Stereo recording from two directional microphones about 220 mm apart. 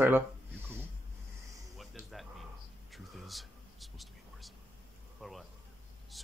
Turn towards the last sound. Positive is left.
turn(degrees=0)  # may be behind; listen again after turning